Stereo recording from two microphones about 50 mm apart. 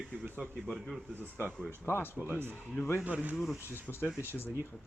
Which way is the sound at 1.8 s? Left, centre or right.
Left.